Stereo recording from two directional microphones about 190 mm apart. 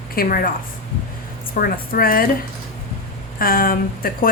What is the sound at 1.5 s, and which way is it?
Speech, 50° left (ahead or behind).